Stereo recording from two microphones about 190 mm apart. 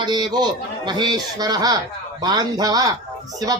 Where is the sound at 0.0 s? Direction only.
25° right (ahead or behind).